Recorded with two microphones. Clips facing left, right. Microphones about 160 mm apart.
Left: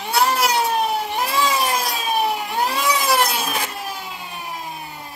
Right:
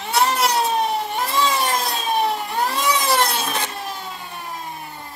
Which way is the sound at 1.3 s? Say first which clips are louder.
Even; 5° left (ahead or behind).